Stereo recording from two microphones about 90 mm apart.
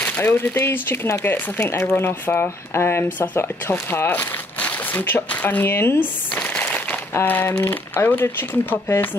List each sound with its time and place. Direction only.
0.0 s speech: 20° left (ahead or behind)